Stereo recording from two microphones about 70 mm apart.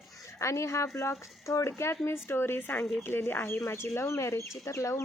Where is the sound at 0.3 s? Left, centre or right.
Left.